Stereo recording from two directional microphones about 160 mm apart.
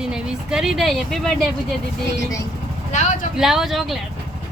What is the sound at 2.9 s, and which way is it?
Speech, 45° left (ahead or behind).